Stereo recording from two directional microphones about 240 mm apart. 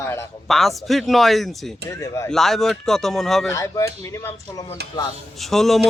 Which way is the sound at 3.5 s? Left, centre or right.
Centre.